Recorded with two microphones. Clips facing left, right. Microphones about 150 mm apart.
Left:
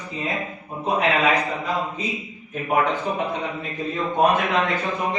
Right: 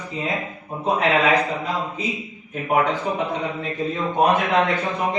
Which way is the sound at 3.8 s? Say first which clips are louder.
Even; centre (ahead or behind).